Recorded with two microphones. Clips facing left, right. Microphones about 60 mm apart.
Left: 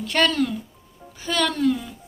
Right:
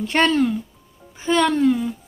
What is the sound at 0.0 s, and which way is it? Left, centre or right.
A woman's voice, right.